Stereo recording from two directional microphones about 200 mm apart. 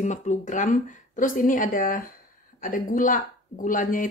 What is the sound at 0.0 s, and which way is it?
Speech, 35° left (ahead or behind).